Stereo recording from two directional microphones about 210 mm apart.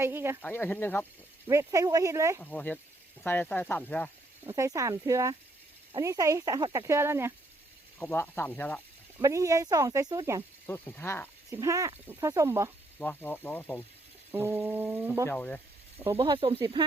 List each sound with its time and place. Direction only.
0.0 s speech: 10° right (ahead or behind)
0.4 s speech: 10° left (ahead or behind)
1.5 s speech: 15° right (ahead or behind)
2.4 s speech: 5° left (ahead or behind)
4.4 s speech: 15° right (ahead or behind)
7.9 s speech: 10° left (ahead or behind)
9.1 s speech: 15° right (ahead or behind)
10.7 s speech: 10° left (ahead or behind)
11.5 s speech: 15° right (ahead or behind)
13.0 s speech: 10° left (ahead or behind)
14.3 s speech: 10° right (ahead or behind)
15.3 s speech: 5° left (ahead or behind)
16.1 s speech: 25° right (ahead or behind)